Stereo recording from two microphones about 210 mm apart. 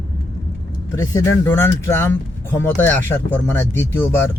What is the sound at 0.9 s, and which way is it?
Speech, 15° left (ahead or behind).